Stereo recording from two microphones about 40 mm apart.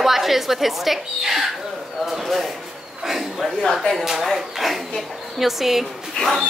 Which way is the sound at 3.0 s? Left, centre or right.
Centre.